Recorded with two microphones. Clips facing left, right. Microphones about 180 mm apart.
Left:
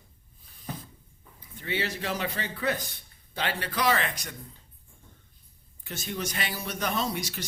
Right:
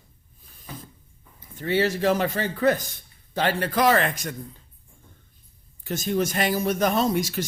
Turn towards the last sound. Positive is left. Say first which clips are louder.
# right 8 dB
turn(degrees=-45)  # may be behind; listen again after turning